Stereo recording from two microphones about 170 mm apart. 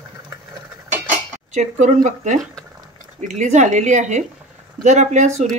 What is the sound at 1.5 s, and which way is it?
Speech, 45° right (ahead or behind).